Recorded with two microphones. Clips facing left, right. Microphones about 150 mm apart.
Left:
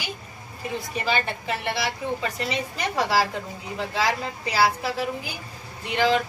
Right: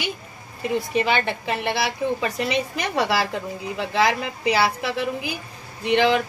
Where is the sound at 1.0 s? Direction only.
70° right (ahead or behind).